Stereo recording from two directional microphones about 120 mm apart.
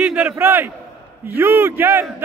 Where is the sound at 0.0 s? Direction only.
10° right (ahead or behind).